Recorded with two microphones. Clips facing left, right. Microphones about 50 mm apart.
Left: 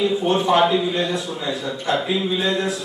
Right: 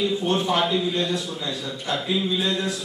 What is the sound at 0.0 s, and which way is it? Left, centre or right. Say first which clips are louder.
A man's voice: left 4 dB; centre.